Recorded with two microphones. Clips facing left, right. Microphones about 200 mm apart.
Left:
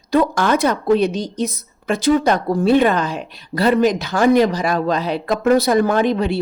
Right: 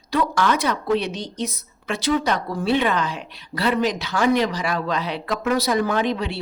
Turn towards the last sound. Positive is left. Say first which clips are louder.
# left 6 dB
turn(degrees=50)  # may be behind; listen again after turning